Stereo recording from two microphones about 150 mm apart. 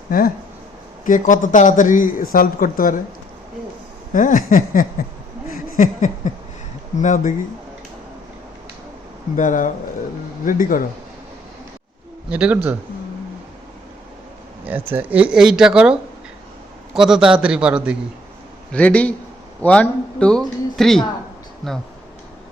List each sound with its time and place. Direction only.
1.0 s a man's voice: 60° left (ahead or behind)
4.1 s a man's voice: 65° left (ahead or behind)
5.5 s a sound: 60° left (ahead or behind)
7.0 s a man's voice: 55° left (ahead or behind)
9.3 s a man's voice: 60° left (ahead or behind)
12.3 s a man's voice: 10° right (ahead or behind)
14.7 s a man's voice: 10° right (ahead or behind)
18.7 s speech: 10° left (ahead or behind)